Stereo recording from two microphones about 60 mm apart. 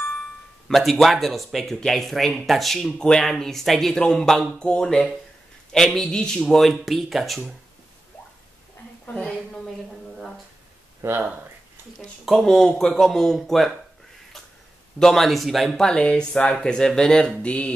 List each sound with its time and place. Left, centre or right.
0.7 s speech: centre
9.0 s a woman's voice: left
11.1 s a sound: right
12.3 s speech: centre
15.0 s speech: centre
17.4 s music: left